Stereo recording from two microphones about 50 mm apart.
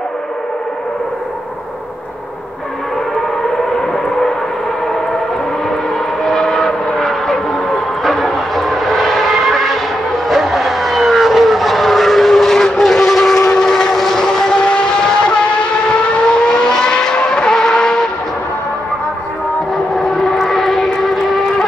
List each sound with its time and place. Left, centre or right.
6.2 s vehicle: centre
13.4 s train: centre
16.4 s vehicle: centre
20.0 s a sound: centre